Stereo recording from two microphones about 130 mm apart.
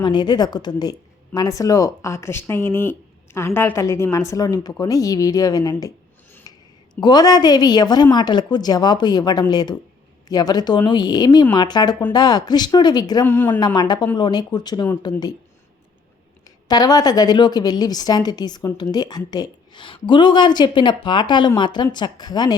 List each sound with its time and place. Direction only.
0.0 s speech: 35° left (ahead or behind)
6.5 s a sound: 30° left (ahead or behind)
7.0 s a woman's voice: 30° left (ahead or behind)
13.2 s speech: 15° left (ahead or behind)
13.7 s a woman's voice: 30° left (ahead or behind)
16.6 s a woman's voice: 30° left (ahead or behind)